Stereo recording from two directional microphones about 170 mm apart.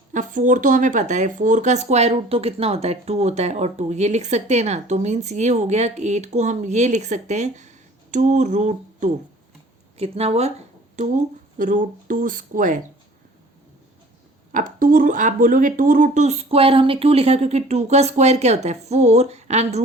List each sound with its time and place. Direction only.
0.1 s speech: 50° right (ahead or behind)
14.5 s speech: 55° right (ahead or behind)